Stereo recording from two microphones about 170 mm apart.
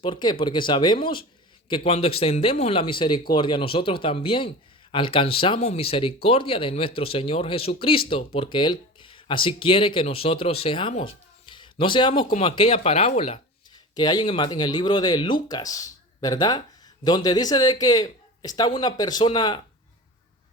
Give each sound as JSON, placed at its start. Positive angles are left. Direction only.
{"t": 0.0, "sound": "speech", "side_deg": 25}
{"t": 13.9, "sound": "speech", "side_deg": 25}